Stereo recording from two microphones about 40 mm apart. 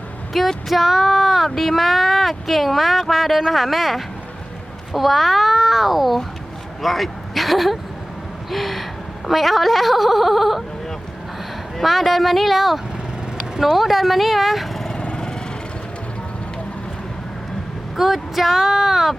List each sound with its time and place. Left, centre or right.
0.3 s speech: centre
11.8 s speech: centre
17.9 s speech: centre